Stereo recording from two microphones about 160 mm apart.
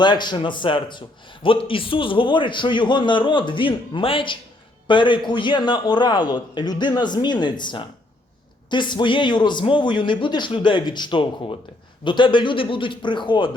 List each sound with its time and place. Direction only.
0.0 s a man's voice: 30° left (ahead or behind)